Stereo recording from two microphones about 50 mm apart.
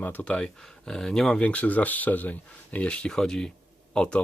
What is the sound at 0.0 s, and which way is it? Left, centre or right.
Speech, left.